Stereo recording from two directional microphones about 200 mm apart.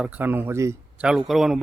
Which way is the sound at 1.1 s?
Centre (ahead or behind).